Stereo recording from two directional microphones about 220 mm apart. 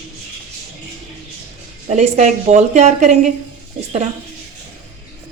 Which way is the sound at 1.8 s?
30° right (ahead or behind).